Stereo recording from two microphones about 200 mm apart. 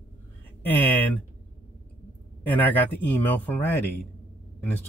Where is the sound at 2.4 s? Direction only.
10° left (ahead or behind).